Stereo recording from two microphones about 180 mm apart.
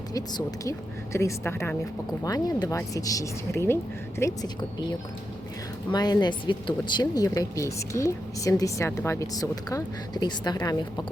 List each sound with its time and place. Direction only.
0.1 s a woman's voice: 20° left (ahead or behind)
5.9 s speech: 25° left (ahead or behind)